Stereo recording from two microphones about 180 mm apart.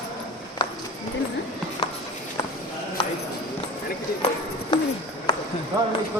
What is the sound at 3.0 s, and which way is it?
Clip-clop, 30° left (ahead or behind).